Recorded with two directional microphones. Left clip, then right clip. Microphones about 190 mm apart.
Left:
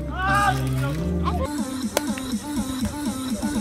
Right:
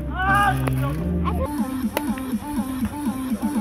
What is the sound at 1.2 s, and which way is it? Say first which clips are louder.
Speech: right 1 dB; 45° right (ahead or behind).